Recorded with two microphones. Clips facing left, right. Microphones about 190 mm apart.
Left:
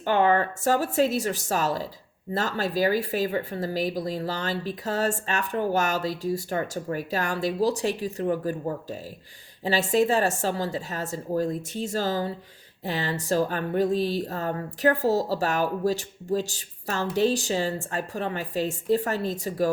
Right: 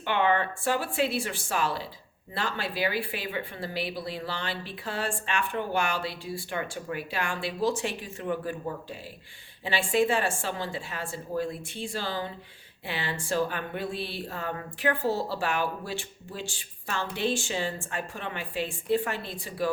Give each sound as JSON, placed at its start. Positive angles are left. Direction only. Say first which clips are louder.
{"t": 0.0, "sound": "speech", "louder": "left 4 dB", "side_deg": 40}